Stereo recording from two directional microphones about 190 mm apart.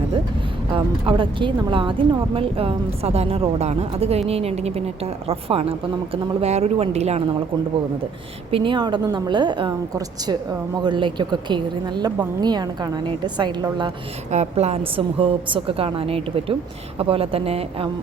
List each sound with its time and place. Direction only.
0.7 s speech: 25° right (ahead or behind)
8.4 s a woman's voice: 25° right (ahead or behind)
14.3 s a woman's voice: 35° right (ahead or behind)